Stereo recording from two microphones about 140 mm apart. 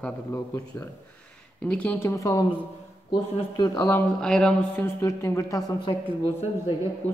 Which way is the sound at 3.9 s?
5° left (ahead or behind).